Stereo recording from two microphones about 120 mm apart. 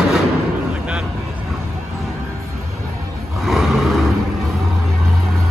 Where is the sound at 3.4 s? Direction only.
Centre (ahead or behind).